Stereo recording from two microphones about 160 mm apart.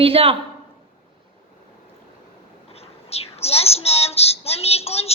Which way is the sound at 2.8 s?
40° left (ahead or behind).